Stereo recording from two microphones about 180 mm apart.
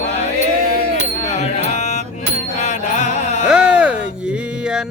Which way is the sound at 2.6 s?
40° left (ahead or behind).